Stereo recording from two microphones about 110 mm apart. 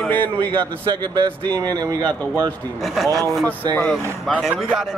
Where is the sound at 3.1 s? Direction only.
30° right (ahead or behind).